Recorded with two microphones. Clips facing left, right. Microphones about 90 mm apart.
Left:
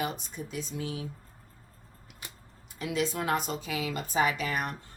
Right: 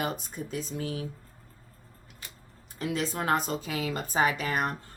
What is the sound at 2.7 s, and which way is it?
Speech, 40° right (ahead or behind).